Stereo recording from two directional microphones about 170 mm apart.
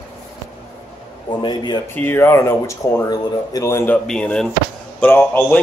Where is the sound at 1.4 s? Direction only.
25° left (ahead or behind).